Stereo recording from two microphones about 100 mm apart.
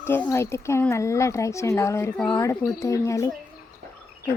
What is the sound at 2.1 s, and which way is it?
Speech, 10° left (ahead or behind).